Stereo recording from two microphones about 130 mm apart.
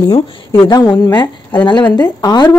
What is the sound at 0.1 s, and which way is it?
Speech, 40° left (ahead or behind).